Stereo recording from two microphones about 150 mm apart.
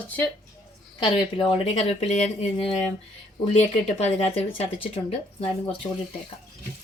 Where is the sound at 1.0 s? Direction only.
35° left (ahead or behind).